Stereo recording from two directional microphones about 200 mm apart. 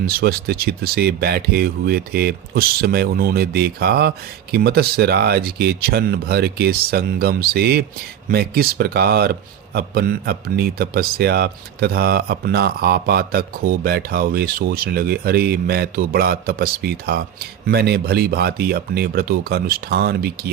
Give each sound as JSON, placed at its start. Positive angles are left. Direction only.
{"t": 0.0, "sound": "speech", "side_deg": -50}